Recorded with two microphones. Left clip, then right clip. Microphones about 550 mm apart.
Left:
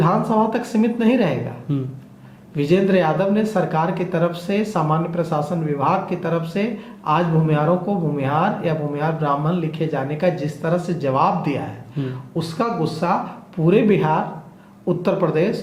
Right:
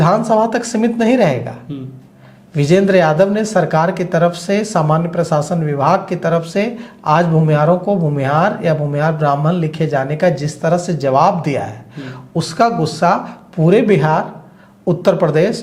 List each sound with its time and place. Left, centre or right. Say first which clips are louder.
0.0 s speech: right 6 dB; right
1.7 s speech: left 3 dB; left
2.6 s speech: right 6 dB; right